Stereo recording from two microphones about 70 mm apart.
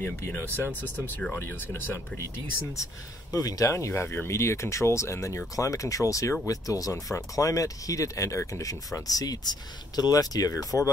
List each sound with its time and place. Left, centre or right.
0.0 s speech: left
2.8 s speech: left